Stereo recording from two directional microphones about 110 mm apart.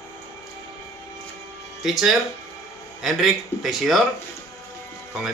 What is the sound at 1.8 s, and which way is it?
A man's voice, 5° right (ahead or behind).